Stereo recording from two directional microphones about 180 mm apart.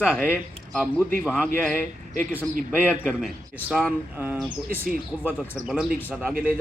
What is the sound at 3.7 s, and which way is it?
Speech, 5° left (ahead or behind).